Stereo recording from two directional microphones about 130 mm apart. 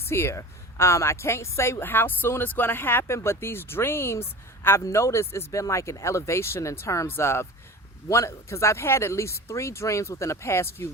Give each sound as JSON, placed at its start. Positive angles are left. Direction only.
{"t": 0.0, "sound": "speech", "side_deg": 20}